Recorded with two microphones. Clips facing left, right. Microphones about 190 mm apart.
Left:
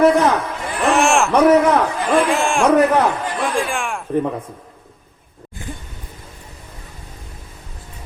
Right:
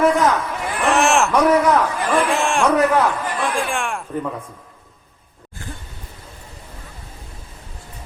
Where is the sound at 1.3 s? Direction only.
25° left (ahead or behind).